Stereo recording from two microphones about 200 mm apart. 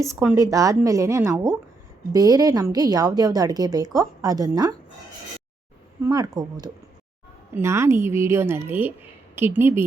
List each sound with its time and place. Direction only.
0.2 s a woman's voice: 15° right (ahead or behind)
6.0 s a woman's voice: 15° right (ahead or behind)